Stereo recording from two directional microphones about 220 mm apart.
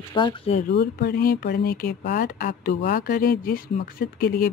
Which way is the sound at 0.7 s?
45° left (ahead or behind).